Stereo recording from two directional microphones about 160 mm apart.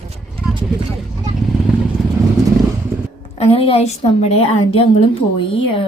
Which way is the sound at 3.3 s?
40° left (ahead or behind).